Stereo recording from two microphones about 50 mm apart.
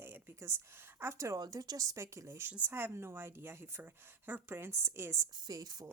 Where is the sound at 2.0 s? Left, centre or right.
Right.